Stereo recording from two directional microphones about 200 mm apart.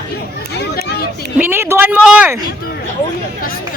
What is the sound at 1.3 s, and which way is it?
Speech, 10° right (ahead or behind).